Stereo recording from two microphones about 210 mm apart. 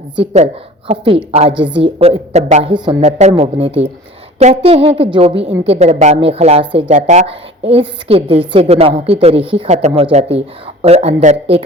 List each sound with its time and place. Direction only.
0.9 s a woman's voice: 30° right (ahead or behind)